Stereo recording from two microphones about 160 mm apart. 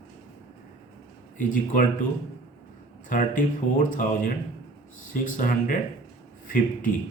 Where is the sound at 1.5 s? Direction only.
55° left (ahead or behind).